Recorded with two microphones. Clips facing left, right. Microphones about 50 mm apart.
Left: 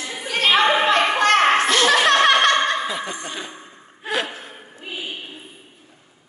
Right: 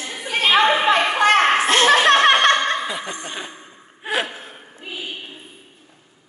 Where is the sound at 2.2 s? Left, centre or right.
Right.